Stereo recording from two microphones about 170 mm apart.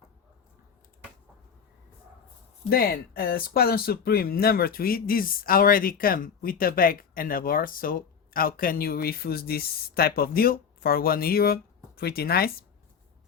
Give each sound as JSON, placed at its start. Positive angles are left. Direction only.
{"t": 2.6, "sound": "speech", "side_deg": 65}